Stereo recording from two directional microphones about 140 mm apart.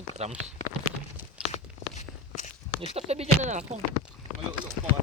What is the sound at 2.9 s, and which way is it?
Speech, 50° right (ahead or behind).